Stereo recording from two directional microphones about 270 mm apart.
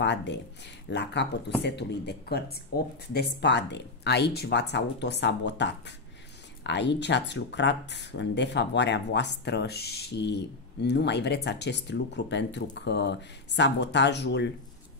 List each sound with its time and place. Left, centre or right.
0.0 s speech: left